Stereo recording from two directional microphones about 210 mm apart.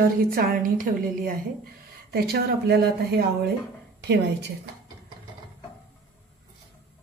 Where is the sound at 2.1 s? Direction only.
50° right (ahead or behind).